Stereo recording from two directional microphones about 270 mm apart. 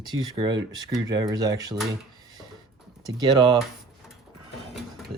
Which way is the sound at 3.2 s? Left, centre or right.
Centre.